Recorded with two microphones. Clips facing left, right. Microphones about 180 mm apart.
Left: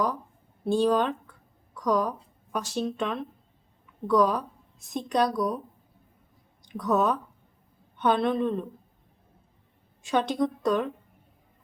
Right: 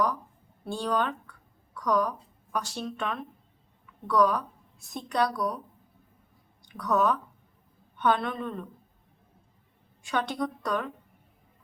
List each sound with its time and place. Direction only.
0.6 s speech: 20° left (ahead or behind)
6.6 s a woman's voice: 20° left (ahead or behind)
10.1 s speech: 20° left (ahead or behind)